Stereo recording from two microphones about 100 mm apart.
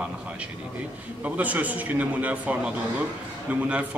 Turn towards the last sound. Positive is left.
turn(degrees=-15)  # may be behind; listen again after turning